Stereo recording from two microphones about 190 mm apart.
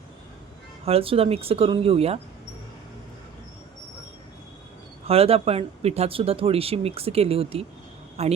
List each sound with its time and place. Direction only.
0.9 s speech: 30° right (ahead or behind)
5.0 s speech: 30° right (ahead or behind)